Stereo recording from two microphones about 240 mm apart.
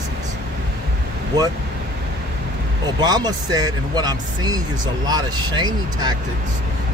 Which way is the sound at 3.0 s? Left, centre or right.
Centre.